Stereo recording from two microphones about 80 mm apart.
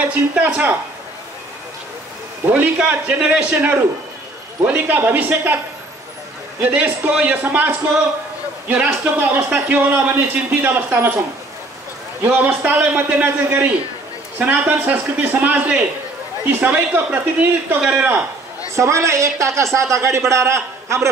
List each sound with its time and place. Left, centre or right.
0.0 s speech: centre
2.5 s a man's voice: centre
6.7 s a man's voice: centre
12.6 s a man's voice: right
18.8 s speech: right